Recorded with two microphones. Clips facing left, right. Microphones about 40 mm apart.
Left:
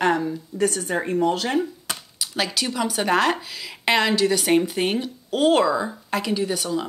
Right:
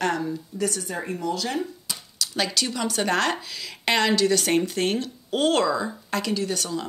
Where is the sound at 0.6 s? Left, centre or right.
Left.